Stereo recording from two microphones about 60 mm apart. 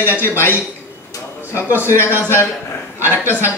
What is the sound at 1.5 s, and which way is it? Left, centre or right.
Speech, left.